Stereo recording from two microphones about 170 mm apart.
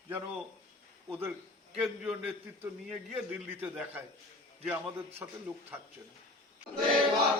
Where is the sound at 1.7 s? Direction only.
5° right (ahead or behind).